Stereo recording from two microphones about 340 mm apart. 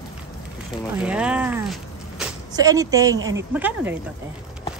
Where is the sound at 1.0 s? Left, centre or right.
Centre.